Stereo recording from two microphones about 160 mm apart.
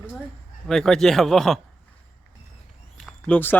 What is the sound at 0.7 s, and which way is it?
Speech, 5° left (ahead or behind).